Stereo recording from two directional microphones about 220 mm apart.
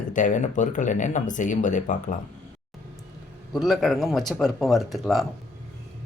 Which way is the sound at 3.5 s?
Centre (ahead or behind).